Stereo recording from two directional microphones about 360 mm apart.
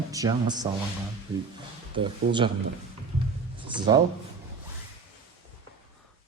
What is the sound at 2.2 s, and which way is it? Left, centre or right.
Speech, right.